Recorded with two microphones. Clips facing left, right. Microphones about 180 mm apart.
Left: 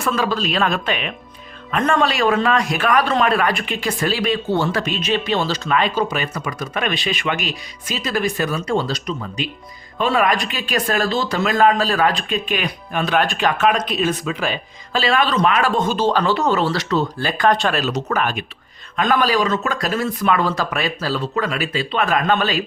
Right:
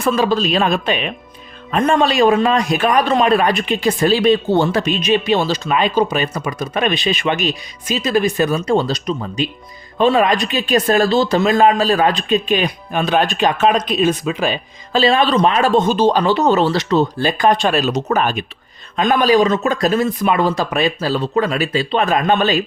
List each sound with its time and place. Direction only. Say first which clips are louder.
0.0 s speech: right 5 dB; 25° right (ahead or behind)